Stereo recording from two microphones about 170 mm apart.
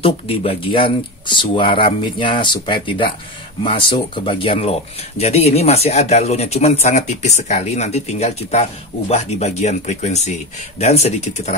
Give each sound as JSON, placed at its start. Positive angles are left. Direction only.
{"t": 0.0, "sound": "speech", "side_deg": 35}